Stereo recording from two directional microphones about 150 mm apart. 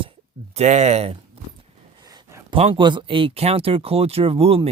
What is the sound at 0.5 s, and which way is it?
Speech, 50° right (ahead or behind).